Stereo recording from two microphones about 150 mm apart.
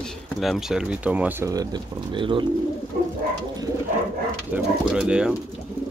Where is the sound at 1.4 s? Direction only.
25° right (ahead or behind).